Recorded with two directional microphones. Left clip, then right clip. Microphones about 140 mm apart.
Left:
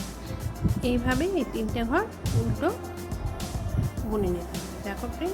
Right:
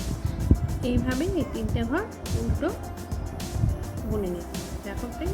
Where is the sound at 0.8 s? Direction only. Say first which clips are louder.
Left 3 dB; 25° left (ahead or behind).